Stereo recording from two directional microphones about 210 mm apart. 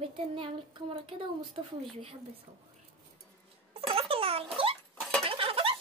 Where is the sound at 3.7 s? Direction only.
25° right (ahead or behind).